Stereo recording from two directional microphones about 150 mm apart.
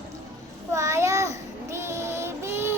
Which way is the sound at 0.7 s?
20° right (ahead or behind).